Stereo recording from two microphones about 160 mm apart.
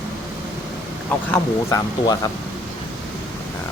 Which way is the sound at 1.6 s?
20° left (ahead or behind).